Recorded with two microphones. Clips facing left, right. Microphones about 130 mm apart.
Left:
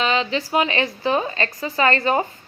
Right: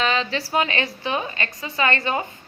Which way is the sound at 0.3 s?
35° right (ahead or behind).